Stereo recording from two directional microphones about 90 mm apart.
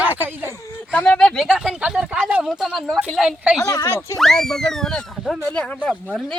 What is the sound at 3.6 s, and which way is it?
Speech, 35° left (ahead or behind).